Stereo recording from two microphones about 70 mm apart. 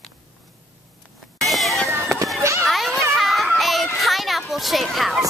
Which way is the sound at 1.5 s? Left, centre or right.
Centre.